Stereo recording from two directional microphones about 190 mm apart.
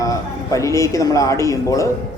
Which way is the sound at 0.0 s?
15° left (ahead or behind).